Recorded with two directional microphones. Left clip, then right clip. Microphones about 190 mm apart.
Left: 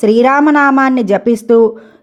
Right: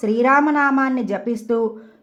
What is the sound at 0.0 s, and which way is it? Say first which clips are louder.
A woman's voice: left 7 dB; 35° left (ahead or behind).